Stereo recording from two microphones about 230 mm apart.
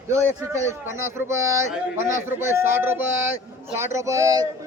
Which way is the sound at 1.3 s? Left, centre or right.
Centre.